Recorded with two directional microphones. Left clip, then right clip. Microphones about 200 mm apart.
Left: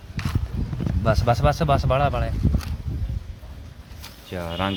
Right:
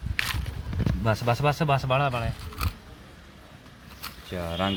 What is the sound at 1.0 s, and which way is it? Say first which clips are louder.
Speech: left 4 dB; 5° left (ahead or behind).